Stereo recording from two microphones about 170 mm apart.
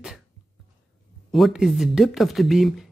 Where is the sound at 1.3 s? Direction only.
Centre (ahead or behind).